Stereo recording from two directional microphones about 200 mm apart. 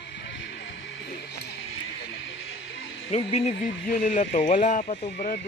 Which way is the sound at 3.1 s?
30° left (ahead or behind).